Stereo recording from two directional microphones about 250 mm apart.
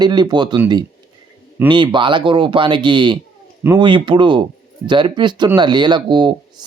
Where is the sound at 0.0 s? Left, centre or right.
Centre.